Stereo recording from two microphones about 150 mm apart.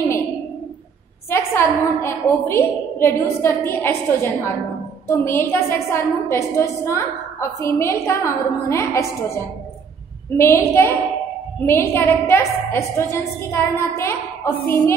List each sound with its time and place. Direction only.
1.3 s a woman's voice: 15° left (ahead or behind)